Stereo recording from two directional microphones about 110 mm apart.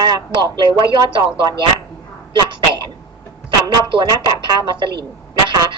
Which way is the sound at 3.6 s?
45° right (ahead or behind).